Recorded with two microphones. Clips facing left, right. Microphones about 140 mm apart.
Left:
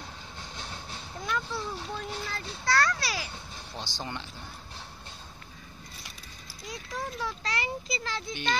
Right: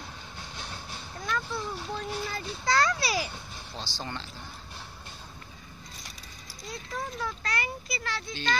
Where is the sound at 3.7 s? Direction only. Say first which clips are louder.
Even; 20° left (ahead or behind).